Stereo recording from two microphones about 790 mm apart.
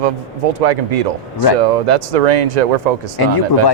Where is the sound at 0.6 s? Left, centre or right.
Right.